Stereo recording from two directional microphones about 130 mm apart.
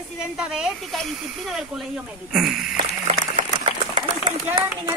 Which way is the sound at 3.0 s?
55° right (ahead or behind).